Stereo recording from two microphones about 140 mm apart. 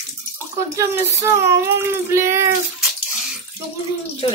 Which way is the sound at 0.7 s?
20° right (ahead or behind).